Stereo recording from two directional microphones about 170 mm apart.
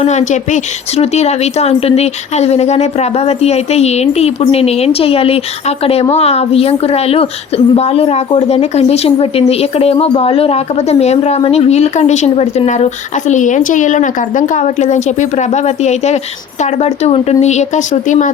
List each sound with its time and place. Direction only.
0.0 s a woman's voice: 40° left (ahead or behind)